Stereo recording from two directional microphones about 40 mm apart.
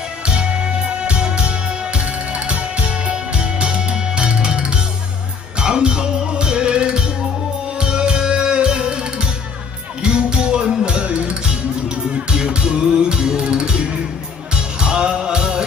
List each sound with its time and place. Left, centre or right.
0.3 s music: right